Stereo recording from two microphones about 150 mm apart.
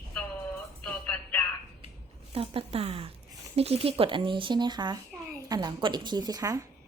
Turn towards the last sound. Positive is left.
turn(degrees=-25)  # may be behind; listen again after turning